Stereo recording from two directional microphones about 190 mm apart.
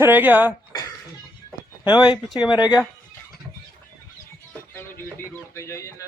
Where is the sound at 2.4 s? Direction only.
20° left (ahead or behind).